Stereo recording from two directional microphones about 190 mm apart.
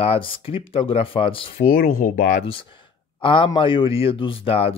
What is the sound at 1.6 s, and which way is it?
Speech, 50° left (ahead or behind).